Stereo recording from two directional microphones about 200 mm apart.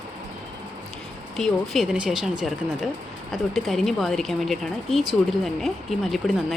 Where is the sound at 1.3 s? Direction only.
Centre (ahead or behind).